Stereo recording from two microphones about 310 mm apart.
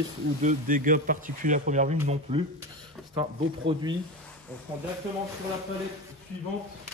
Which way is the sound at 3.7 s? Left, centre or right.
Centre.